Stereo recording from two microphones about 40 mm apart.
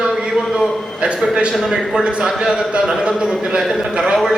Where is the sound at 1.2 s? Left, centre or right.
Right.